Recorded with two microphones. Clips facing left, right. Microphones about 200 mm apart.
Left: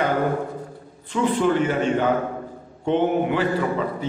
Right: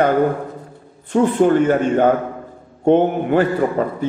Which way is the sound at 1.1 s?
50° right (ahead or behind).